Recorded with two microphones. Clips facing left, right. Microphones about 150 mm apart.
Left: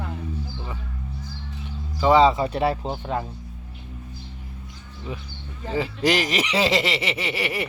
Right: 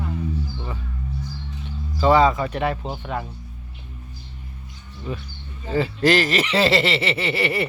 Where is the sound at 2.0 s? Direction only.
20° left (ahead or behind).